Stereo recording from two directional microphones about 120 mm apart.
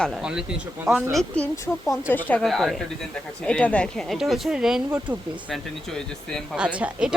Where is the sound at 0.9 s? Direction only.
25° right (ahead or behind).